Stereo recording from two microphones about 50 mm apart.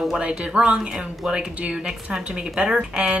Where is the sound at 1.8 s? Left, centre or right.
Centre.